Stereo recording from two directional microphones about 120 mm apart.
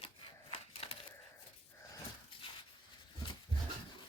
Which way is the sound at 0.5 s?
55° left (ahead or behind).